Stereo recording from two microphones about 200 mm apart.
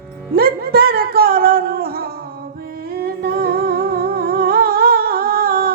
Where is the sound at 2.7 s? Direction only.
50° right (ahead or behind).